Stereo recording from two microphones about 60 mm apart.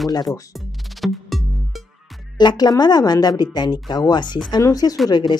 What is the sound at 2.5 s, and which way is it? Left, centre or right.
Speech, left.